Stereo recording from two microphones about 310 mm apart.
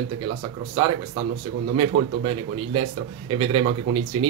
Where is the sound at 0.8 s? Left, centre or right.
Centre.